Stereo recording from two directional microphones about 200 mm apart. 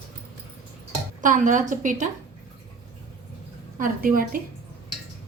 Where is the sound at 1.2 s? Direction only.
40° right (ahead or behind).